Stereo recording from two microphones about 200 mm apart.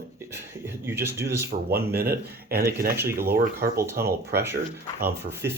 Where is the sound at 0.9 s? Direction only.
10° right (ahead or behind).